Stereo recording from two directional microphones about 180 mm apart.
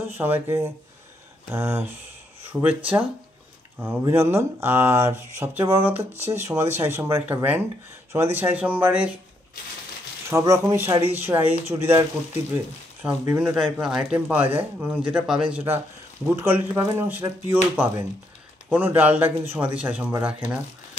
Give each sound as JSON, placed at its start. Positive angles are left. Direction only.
{"t": 0.2, "sound": "speech", "side_deg": -15}
{"t": 10.3, "sound": "speech", "side_deg": -15}
{"t": 13.0, "sound": "speech", "side_deg": -10}
{"t": 18.7, "sound": "speech", "side_deg": -10}